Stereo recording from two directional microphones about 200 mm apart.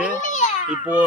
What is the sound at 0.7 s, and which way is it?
Speech, 5° right (ahead or behind).